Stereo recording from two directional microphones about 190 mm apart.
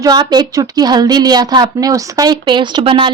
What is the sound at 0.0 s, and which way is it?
Speech, 20° right (ahead or behind).